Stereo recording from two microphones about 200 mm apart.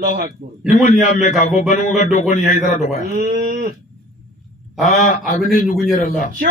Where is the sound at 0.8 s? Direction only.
35° left (ahead or behind).